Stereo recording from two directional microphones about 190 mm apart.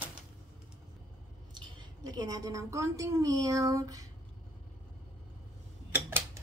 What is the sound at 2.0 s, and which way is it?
A woman's voice, 20° right (ahead or behind).